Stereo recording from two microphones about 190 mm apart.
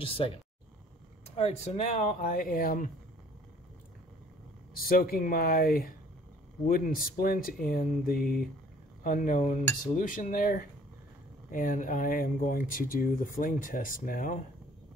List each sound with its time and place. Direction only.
0.2 s speech: 30° left (ahead or behind); by 2.9 s 50° left (ahead or behind)
4.8 s speech: 50° left (ahead or behind)